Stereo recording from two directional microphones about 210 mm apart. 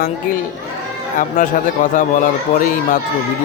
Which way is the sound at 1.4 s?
35° left (ahead or behind).